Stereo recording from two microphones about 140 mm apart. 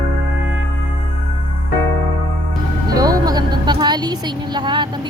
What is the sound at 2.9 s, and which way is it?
Music, 25° right (ahead or behind).